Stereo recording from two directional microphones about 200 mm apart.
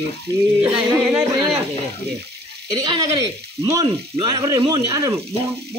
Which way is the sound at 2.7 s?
20° right (ahead or behind).